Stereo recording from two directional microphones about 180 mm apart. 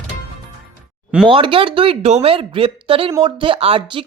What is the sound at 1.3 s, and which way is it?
Speech, 30° right (ahead or behind).